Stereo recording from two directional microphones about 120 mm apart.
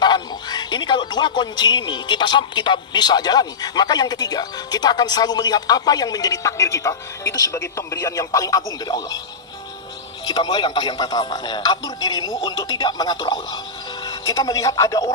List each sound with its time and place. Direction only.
0.0 s speech: 35° left (ahead or behind)
10.2 s speech: 35° left (ahead or behind)